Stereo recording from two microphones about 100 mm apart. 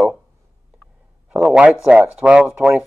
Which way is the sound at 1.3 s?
10° right (ahead or behind).